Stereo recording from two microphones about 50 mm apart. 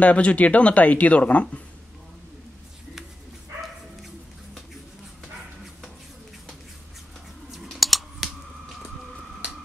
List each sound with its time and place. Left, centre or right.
0.0 s speech: left
7.6 s scissors: centre